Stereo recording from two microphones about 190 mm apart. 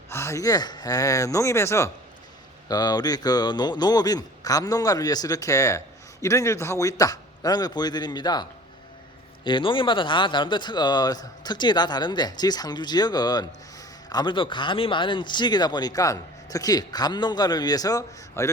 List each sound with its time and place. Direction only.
0.1 s speech: 15° left (ahead or behind)